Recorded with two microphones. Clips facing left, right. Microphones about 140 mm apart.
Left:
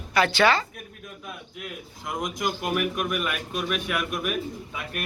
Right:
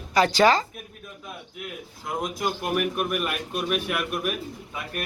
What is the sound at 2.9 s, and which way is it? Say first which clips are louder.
Speech: right 1 dB; 40° right (ahead or behind).